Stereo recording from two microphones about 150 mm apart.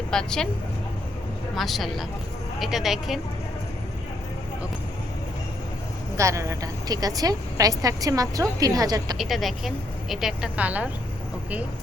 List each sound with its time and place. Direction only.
0.1 s speech: 5° left (ahead or behind)
1.5 s speech: centre (ahead or behind)
6.1 s a woman's voice: 20° right (ahead or behind)
9.1 s speech: centre (ahead or behind)